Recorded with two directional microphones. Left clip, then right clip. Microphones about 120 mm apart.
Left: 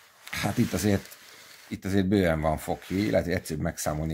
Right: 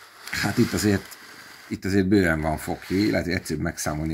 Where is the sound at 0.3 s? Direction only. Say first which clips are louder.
Right 5 dB; 25° left (ahead or behind).